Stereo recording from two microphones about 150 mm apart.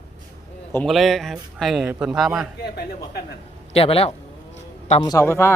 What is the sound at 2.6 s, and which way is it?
Speech, 90° left.